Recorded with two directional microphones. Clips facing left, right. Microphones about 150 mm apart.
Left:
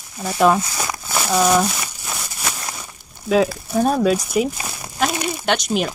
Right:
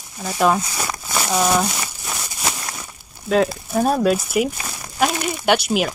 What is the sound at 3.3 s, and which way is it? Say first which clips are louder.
Speech: left 1 dB; centre (ahead or behind).